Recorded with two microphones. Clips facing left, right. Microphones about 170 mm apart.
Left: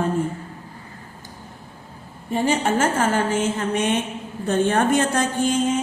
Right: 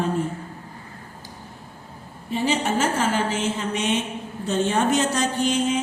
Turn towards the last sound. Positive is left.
turn(degrees=50)  # may be behind; listen again after turning